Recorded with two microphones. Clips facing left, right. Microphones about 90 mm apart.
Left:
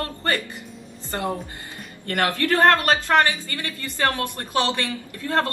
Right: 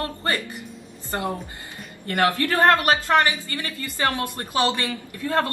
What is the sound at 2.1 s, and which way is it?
A woman's voice, 20° right (ahead or behind).